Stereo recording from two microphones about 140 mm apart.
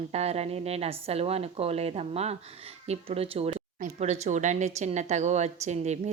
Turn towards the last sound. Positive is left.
turn(degrees=-55)  # may be behind; listen again after turning